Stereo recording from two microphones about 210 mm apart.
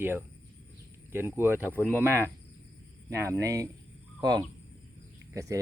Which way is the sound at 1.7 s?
10° left (ahead or behind).